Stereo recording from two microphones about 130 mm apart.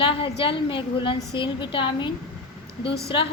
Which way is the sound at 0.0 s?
40° left (ahead or behind).